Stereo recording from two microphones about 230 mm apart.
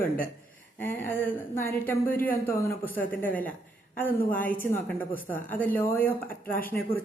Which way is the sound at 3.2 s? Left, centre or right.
Centre.